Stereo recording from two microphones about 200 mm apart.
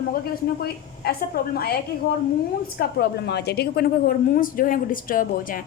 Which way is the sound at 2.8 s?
55° left (ahead or behind).